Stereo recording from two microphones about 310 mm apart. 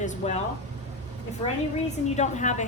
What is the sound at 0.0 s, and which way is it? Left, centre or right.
Speech, left.